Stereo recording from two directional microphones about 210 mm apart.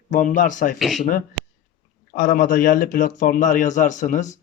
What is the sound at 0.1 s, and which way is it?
Speech, 40° left (ahead or behind).